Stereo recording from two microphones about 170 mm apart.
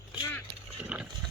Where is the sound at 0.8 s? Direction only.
5° right (ahead or behind).